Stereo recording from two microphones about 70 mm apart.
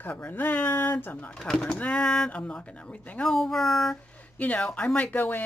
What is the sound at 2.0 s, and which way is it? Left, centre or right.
Speech, centre.